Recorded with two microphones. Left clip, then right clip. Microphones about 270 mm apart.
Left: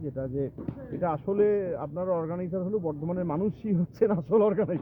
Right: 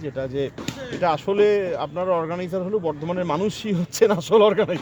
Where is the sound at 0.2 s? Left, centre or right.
Centre.